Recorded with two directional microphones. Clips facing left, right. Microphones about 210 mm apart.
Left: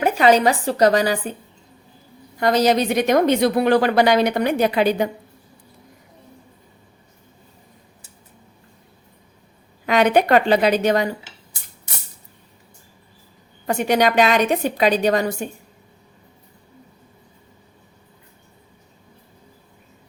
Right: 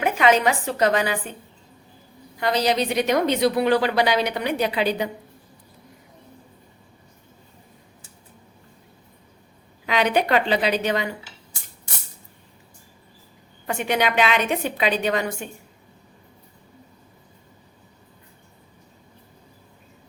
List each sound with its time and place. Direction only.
0.0 s a woman's voice: 35° left (ahead or behind)
2.4 s a woman's voice: 45° left (ahead or behind)
9.8 s a woman's voice: 45° left (ahead or behind)
13.7 s a woman's voice: 40° left (ahead or behind)